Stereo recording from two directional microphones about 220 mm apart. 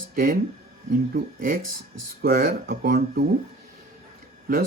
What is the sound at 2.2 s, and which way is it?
Speech, 40° right (ahead or behind).